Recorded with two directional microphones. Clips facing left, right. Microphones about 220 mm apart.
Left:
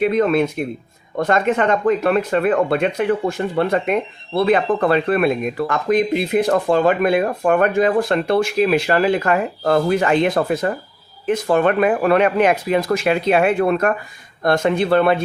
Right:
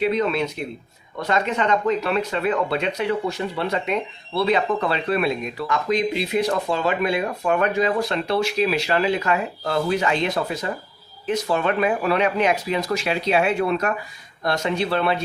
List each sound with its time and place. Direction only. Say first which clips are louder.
0.0 s speech: left 5 dB; 50° left (ahead or behind)